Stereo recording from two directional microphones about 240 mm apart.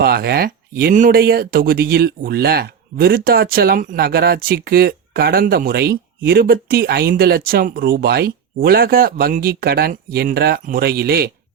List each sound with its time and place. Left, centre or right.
0.0 s speech: right